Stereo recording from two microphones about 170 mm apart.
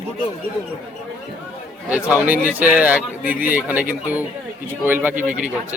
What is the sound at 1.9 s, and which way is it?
A man's voice, 10° right (ahead or behind).